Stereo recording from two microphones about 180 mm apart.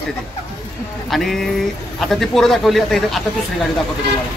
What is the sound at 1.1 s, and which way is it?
Speech, centre (ahead or behind).